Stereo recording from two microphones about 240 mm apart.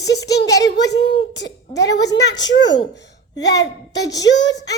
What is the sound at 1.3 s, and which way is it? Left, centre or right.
Speech, left.